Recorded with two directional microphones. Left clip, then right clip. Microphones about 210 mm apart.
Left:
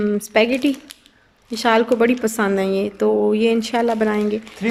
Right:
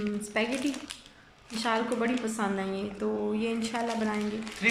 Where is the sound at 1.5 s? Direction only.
50° left (ahead or behind).